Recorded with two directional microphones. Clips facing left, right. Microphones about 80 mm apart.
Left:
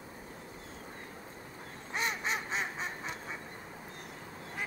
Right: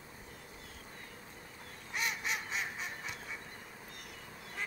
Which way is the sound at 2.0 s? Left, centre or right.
Left.